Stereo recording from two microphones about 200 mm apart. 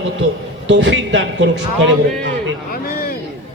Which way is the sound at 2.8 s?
45° left (ahead or behind).